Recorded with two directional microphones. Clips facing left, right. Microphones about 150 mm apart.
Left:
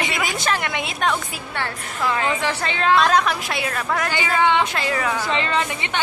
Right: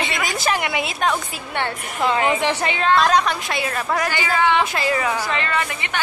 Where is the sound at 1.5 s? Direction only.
25° right (ahead or behind).